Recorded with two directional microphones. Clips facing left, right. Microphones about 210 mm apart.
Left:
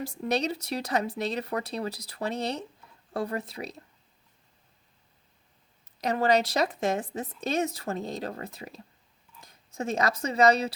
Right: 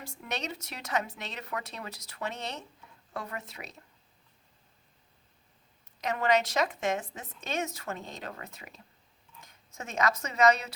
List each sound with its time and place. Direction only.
0.0 s speech: 35° left (ahead or behind)
6.0 s speech: 35° left (ahead or behind)